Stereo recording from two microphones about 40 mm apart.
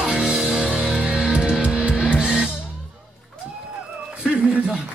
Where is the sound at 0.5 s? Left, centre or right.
Right.